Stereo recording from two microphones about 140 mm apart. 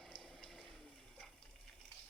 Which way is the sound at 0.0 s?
Centre (ahead or behind).